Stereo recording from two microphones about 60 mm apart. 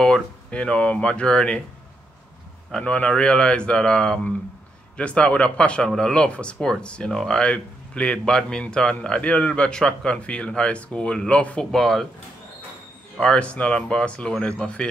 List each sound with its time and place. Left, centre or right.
0.0 s speech: centre
2.8 s speech: centre
11.7 s speech: centre
13.2 s speech: centre